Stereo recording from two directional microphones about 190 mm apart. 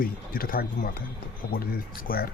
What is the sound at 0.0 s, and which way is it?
Speech, 50° left (ahead or behind).